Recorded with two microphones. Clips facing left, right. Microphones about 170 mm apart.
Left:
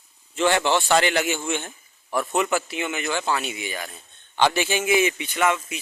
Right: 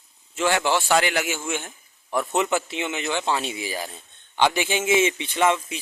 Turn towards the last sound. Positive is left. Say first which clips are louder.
# right 1 dB
turn(degrees=-25)  # may be behind; listen again after turning